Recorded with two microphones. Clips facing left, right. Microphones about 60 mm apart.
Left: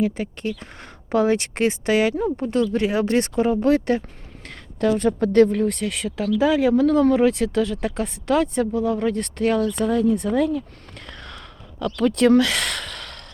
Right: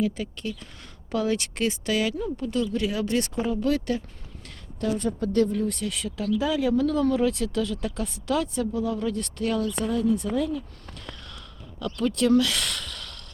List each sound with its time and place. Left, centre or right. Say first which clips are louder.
0.0 s speech: left 4 dB; left
4.4 s speech: left 7 dB; left
9.8 s a sound: left 4 dB; left
11.9 s speech: left 5 dB; left